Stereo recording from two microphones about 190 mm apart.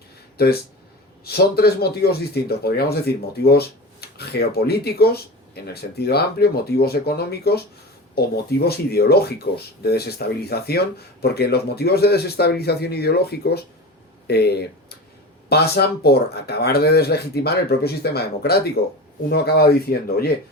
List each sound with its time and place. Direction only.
0.4 s speech: 55° left (ahead or behind)